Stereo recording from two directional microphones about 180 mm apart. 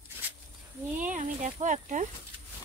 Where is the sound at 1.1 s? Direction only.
45° right (ahead or behind).